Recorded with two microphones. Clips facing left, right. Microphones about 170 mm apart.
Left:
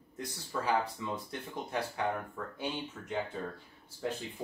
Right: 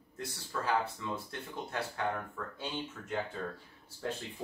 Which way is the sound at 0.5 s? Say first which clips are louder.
Left 1 dB; 10° left (ahead or behind).